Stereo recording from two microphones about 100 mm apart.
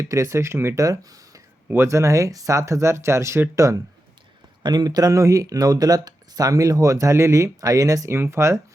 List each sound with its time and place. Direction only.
0.0 s speech: 30° right (ahead or behind)
4.6 s speech: 40° right (ahead or behind)